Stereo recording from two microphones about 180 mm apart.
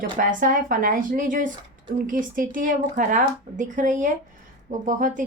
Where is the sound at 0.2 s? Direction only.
50° right (ahead or behind).